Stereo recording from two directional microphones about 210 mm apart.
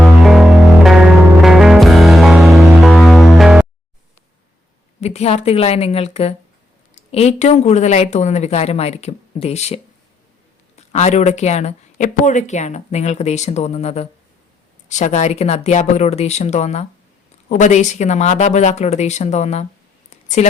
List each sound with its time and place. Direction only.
0.0 s music: centre (ahead or behind)
4.9 s a woman's voice: 30° left (ahead or behind)